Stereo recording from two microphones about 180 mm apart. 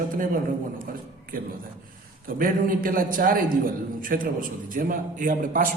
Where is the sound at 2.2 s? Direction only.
50° right (ahead or behind).